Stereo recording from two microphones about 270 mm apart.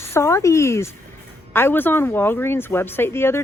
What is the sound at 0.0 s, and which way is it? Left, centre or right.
Speech, centre.